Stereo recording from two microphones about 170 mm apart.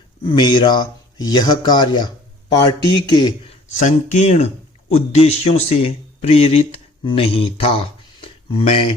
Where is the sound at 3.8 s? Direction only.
45° left (ahead or behind).